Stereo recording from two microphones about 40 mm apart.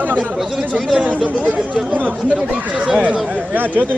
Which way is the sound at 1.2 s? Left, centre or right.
Right.